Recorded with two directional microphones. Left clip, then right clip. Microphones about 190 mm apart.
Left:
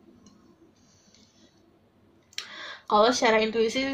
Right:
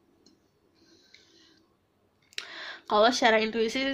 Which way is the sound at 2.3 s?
50° right (ahead or behind).